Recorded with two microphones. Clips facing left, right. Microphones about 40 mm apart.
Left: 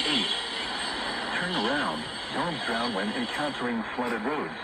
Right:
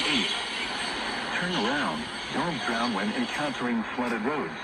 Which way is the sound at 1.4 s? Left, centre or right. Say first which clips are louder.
Even; left.